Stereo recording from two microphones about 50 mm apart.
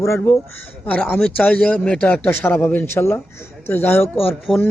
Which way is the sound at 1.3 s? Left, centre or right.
Left.